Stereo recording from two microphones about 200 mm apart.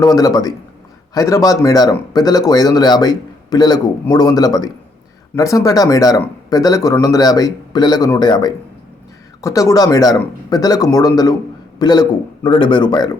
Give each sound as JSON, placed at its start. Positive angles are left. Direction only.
{"t": 0.0, "sound": "speech", "side_deg": 20}